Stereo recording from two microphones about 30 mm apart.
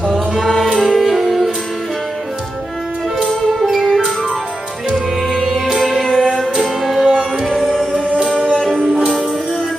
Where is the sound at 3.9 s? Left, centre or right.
Centre.